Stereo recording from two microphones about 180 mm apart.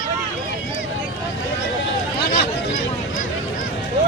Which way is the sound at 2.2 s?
60° left (ahead or behind).